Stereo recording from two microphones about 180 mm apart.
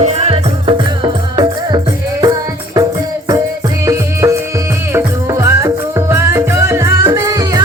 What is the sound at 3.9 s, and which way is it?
Music, 15° right (ahead or behind).